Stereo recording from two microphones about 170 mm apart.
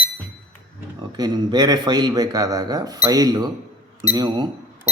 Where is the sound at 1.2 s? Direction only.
25° right (ahead or behind).